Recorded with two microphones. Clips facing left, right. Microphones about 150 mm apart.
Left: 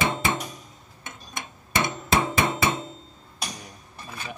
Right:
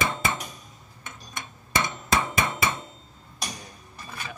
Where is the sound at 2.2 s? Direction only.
15° left (ahead or behind).